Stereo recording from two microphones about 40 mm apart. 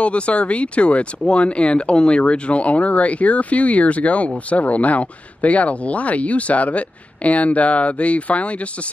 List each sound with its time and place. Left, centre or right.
0.0 s speech: left